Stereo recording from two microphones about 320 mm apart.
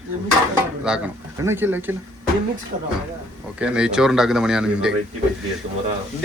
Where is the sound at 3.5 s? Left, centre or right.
Centre.